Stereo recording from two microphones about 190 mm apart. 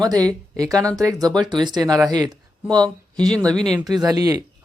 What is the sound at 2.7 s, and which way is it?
Speech, 5° left (ahead or behind).